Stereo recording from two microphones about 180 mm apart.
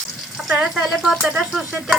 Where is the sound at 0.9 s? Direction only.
5° right (ahead or behind).